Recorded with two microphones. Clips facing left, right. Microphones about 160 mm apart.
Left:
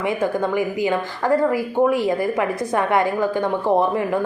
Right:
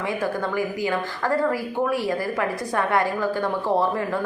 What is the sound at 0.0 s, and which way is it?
Speech, 20° left (ahead or behind).